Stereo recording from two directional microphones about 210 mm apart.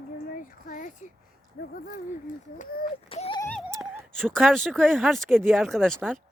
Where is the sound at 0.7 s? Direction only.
40° left (ahead or behind).